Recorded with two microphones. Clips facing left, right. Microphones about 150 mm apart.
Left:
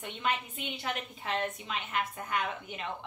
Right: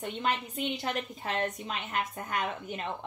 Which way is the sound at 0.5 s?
40° right (ahead or behind).